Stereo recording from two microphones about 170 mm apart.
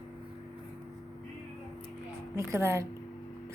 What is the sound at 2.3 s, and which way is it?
Speech, 15° right (ahead or behind).